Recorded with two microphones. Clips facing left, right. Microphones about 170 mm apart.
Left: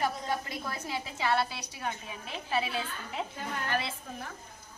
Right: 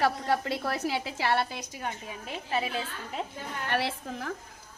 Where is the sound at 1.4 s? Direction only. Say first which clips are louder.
Right 1 dB; 50° right (ahead or behind).